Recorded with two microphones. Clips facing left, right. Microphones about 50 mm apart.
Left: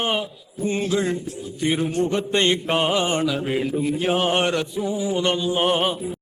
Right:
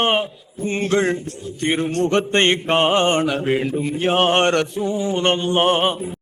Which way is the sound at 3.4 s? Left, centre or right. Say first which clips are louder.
Right 3 dB; centre.